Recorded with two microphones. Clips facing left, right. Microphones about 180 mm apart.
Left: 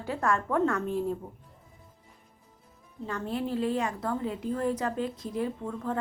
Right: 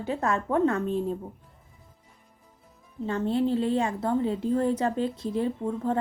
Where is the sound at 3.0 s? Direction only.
25° right (ahead or behind).